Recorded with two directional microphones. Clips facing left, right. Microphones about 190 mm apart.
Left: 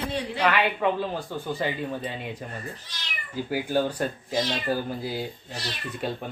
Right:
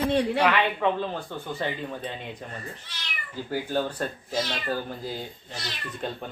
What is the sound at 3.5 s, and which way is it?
Speech, 10° left (ahead or behind).